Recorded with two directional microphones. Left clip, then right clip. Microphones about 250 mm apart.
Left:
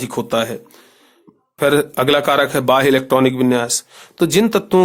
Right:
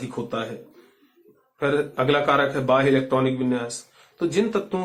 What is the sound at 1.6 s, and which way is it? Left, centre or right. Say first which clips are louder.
A man's voice: left 8 dB; left.